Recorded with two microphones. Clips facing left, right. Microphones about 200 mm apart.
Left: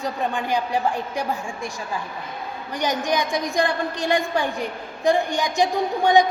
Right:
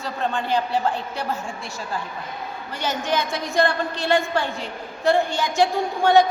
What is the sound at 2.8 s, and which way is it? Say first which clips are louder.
A woman's voice: left 1 dB; 15° left (ahead or behind).